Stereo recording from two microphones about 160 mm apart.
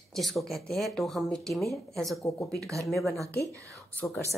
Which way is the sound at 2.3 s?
20° left (ahead or behind).